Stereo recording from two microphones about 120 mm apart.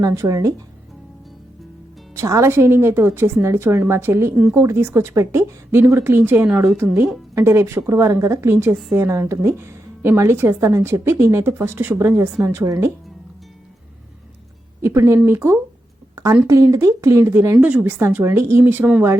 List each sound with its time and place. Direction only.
0.0 s a woman's voice: 30° right (ahead or behind)
2.1 s a woman's voice: 25° right (ahead or behind)
14.8 s a woman's voice: 25° right (ahead or behind)